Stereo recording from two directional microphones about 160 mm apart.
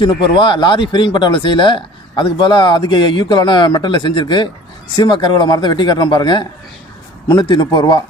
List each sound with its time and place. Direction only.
0.0 s a man's voice: 30° left (ahead or behind)